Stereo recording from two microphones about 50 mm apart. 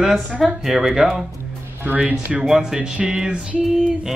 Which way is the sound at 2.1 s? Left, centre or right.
Right.